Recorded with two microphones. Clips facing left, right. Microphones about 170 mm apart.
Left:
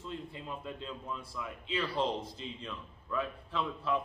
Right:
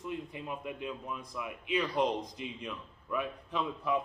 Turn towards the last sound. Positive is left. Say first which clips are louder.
# right 1 dB
turn(degrees=-15)  # may be behind; listen again after turning